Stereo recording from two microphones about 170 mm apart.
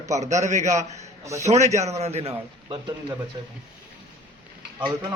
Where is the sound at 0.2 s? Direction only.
45° right (ahead or behind).